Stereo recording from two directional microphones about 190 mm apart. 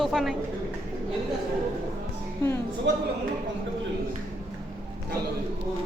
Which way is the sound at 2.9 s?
65° right (ahead or behind).